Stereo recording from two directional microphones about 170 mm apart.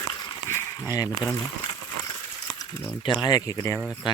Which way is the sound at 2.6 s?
15° left (ahead or behind).